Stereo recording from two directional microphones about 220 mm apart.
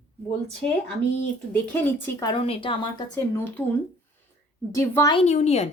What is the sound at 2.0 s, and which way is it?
Speech, 20° left (ahead or behind).